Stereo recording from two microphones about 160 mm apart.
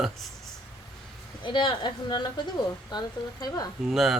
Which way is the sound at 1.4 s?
30° left (ahead or behind).